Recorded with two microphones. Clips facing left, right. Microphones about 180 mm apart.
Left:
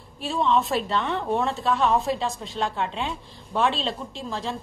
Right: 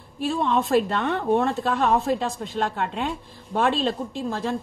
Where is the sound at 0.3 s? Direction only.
55° right (ahead or behind).